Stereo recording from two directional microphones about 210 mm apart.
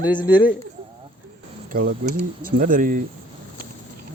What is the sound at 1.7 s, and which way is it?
Speech, 45° right (ahead or behind).